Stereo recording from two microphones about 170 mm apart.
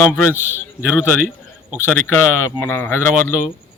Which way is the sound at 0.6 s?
10° left (ahead or behind).